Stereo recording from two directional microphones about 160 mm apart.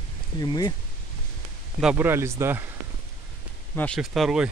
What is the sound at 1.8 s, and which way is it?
Speech, 10° right (ahead or behind).